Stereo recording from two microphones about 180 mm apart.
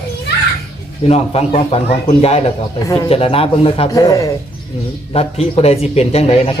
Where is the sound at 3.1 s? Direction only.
35° left (ahead or behind).